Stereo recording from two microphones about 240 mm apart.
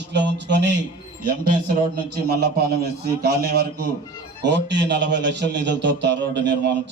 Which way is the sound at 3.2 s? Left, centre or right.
Right.